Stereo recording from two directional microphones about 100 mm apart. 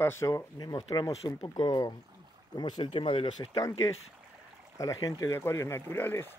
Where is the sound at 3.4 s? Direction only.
40° left (ahead or behind).